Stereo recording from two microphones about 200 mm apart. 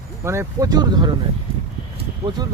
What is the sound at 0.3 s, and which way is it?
Speech, 15° right (ahead or behind).